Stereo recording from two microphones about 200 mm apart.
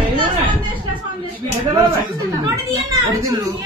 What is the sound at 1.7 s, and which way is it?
A child's voice, 20° right (ahead or behind).